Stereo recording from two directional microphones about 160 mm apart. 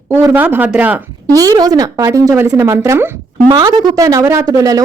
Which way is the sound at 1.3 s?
20° right (ahead or behind).